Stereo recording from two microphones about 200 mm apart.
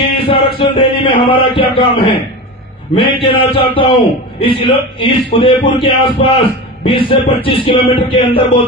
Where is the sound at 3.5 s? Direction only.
25° left (ahead or behind).